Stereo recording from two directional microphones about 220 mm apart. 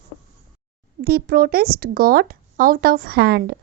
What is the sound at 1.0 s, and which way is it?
Speech, 45° right (ahead or behind).